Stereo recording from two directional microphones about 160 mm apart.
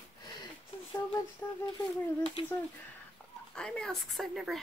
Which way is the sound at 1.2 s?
20° left (ahead or behind).